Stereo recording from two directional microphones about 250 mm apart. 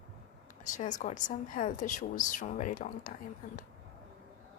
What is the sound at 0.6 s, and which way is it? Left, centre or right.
A woman's voice, left.